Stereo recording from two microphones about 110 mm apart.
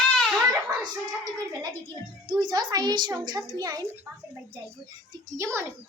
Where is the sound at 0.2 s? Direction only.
Centre (ahead or behind).